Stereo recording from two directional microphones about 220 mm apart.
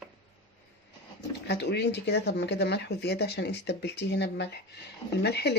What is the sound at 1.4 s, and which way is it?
Speech, 50° left (ahead or behind).